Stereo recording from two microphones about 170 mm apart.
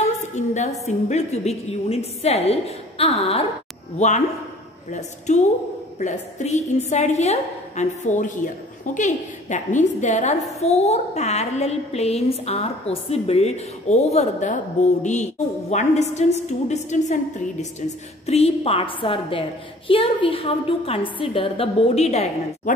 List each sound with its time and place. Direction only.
0.6 s a woman's voice: 40° left (ahead or behind)